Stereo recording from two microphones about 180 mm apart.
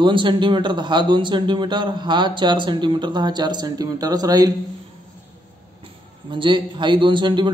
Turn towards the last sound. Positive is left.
turn(degrees=-25)  # may be behind; listen again after turning